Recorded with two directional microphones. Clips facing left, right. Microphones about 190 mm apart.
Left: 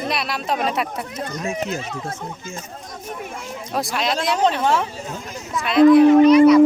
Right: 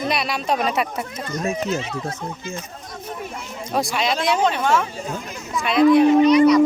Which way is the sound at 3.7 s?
Centre (ahead or behind).